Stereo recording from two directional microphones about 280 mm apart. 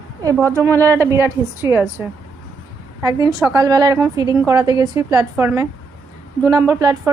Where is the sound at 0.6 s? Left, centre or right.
Centre.